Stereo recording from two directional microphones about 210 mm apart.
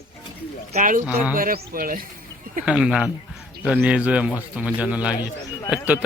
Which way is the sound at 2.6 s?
5° right (ahead or behind).